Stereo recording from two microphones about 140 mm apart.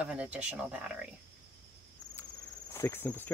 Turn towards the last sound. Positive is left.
turn(degrees=15)  # may be behind; listen again after turning